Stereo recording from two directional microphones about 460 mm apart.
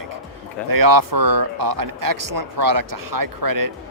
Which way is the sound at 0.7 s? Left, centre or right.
Right.